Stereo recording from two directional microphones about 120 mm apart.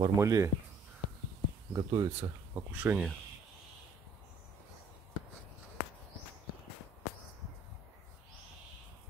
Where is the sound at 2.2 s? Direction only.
20° right (ahead or behind).